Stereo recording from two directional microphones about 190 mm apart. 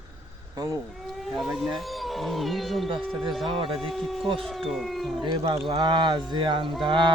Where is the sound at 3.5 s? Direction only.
30° right (ahead or behind).